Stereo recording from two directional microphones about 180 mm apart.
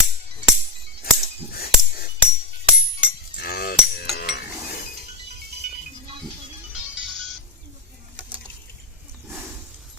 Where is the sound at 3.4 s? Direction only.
60° left (ahead or behind).